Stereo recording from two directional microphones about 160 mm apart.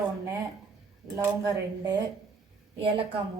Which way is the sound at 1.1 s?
20° right (ahead or behind).